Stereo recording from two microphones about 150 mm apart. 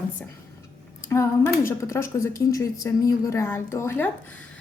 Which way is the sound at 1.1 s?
20° left (ahead or behind).